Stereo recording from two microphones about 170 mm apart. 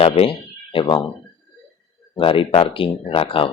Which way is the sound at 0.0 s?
35° left (ahead or behind).